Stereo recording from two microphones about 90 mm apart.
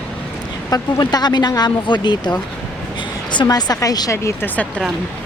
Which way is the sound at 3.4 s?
40° left (ahead or behind).